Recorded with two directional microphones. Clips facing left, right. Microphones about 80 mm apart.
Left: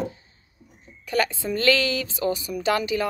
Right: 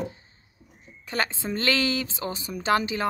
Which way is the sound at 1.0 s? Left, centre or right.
Right.